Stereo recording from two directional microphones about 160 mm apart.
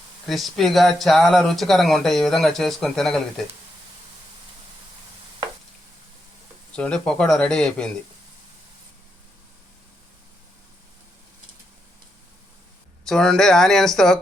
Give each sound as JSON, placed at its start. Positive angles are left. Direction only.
{"t": 0.3, "sound": "speech", "side_deg": 0}
{"t": 6.7, "sound": "speech", "side_deg": 5}
{"t": 13.1, "sound": "speech", "side_deg": 5}